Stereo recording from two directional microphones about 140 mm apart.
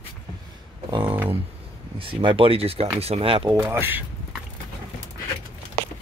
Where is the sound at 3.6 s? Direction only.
15° right (ahead or behind).